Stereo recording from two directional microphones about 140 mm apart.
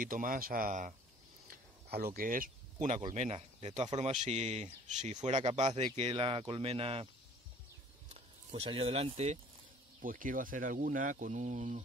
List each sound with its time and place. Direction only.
0.0 s speech: 75° right (ahead or behind)
2.1 s speech: 80° right; by 5.4 s 60° right (ahead or behind)
5.4 s speech: 40° right (ahead or behind)
8.5 s speech: 40° right (ahead or behind)
10.0 s speech: 75° right (ahead or behind); by 11.8 s 60° right (ahead or behind)